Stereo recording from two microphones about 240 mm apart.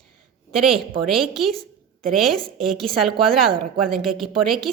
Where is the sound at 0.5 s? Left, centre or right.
Centre.